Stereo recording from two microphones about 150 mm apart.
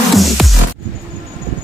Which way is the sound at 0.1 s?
Centre (ahead or behind).